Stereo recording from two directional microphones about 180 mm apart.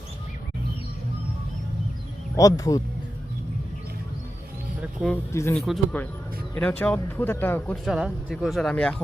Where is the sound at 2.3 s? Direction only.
20° left (ahead or behind).